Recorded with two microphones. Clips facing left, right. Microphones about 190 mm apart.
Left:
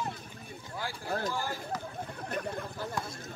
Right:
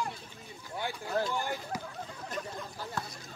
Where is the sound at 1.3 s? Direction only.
20° right (ahead or behind).